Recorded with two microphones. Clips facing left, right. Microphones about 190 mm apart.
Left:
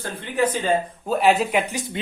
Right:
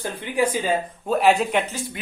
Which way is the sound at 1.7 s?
20° left (ahead or behind).